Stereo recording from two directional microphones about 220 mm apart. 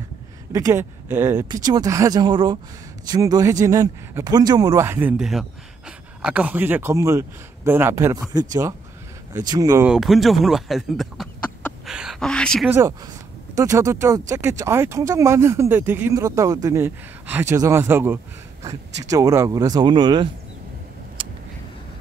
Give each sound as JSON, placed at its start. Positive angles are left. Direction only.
{"t": 0.5, "sound": "speech", "side_deg": -15}
{"t": 9.8, "sound": "speech", "side_deg": 0}
{"t": 12.6, "sound": "speech", "side_deg": -10}